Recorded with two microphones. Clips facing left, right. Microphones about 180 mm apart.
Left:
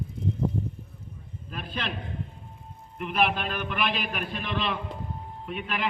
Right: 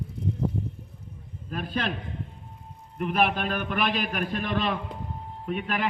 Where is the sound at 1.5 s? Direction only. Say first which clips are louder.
Right 5 dB; 45° right (ahead or behind).